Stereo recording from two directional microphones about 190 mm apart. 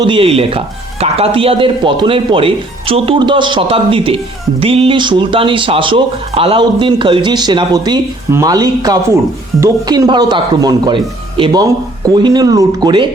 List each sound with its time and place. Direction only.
0.0 s speech: 25° right (ahead or behind)